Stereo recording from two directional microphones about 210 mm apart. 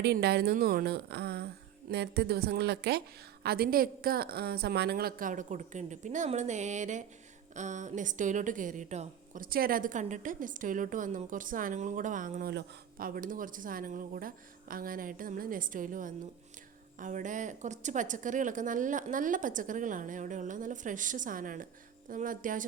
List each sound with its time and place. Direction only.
0.0 s a woman's voice: 50° right (ahead or behind)